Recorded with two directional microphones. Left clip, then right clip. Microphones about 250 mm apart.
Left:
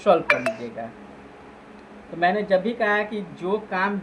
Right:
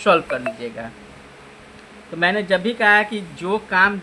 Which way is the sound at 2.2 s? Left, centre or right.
Right.